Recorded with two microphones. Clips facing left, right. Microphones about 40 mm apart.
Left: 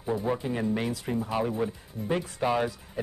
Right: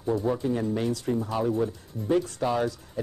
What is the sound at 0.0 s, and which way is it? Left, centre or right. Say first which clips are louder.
Speech: right 3 dB; centre.